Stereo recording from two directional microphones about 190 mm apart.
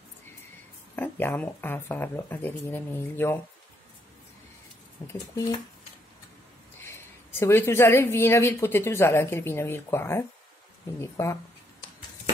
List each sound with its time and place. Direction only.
0.9 s a woman's voice: 10° left (ahead or behind)
5.0 s a woman's voice: 15° left (ahead or behind)
6.8 s a woman's voice: 15° left (ahead or behind)